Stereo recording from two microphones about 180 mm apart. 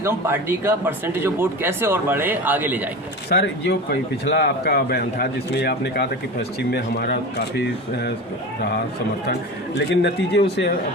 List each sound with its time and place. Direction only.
0.0 s speech: 15° right (ahead or behind)
3.2 s speech: 65° left (ahead or behind)
9.7 s speech: 70° left (ahead or behind)